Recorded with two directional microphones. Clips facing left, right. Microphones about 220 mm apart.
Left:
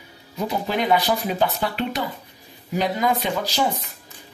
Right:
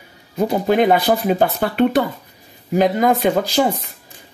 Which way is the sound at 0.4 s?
50° right (ahead or behind).